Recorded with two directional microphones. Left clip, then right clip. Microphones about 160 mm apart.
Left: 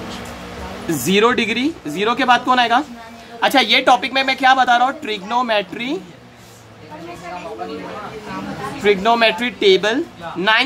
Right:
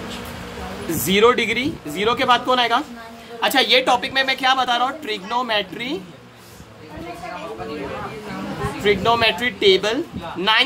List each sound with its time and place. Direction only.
0.8 s a woman's voice: 45° left (ahead or behind)
8.8 s a woman's voice: 45° left (ahead or behind)